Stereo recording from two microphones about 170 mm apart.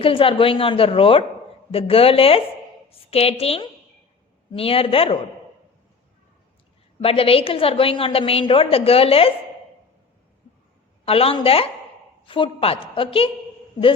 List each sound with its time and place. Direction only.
0.0 s a woman's voice: 30° left (ahead or behind)
7.0 s a woman's voice: 35° left (ahead or behind)
11.0 s a woman's voice: 35° left (ahead or behind)